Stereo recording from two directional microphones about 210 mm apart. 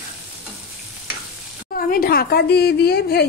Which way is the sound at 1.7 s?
45° left (ahead or behind).